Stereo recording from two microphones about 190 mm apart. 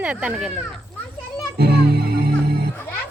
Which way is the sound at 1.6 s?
55° right (ahead or behind).